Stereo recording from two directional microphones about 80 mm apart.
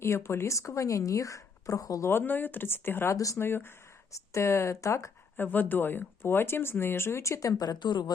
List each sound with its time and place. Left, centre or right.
0.0 s speech: left
2.0 s speech: left
5.4 s speech: left